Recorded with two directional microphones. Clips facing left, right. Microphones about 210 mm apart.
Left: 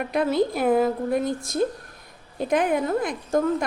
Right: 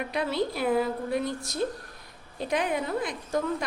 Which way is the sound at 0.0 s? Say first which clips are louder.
Left 6 dB; 50° left (ahead or behind).